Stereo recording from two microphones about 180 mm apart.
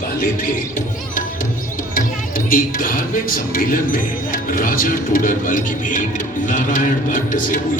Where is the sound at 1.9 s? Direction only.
50° left (ahead or behind).